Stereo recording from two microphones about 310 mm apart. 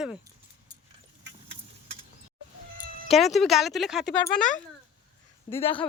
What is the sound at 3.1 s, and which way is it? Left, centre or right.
Speech, centre.